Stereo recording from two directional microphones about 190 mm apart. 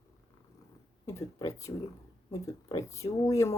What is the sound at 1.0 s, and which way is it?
Speech, 15° left (ahead or behind).